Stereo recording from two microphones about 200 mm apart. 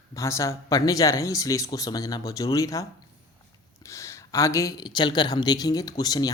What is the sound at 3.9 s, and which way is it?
Speech, 15° left (ahead or behind).